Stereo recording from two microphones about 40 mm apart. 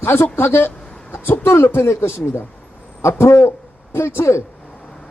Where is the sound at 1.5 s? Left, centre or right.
Left.